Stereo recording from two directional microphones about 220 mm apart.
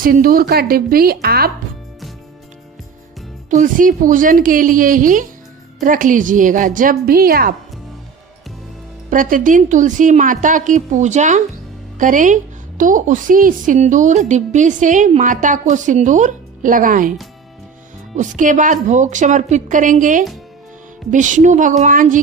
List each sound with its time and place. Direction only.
0.0 s a woman's voice: 40° right (ahead or behind)
3.5 s a woman's voice: 35° right (ahead or behind)
9.0 s a woman's voice: 35° right (ahead or behind)
18.2 s a woman's voice: 35° right (ahead or behind)